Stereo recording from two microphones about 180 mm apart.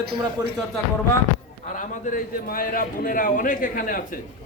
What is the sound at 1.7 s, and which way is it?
A man's voice, 50° left (ahead or behind).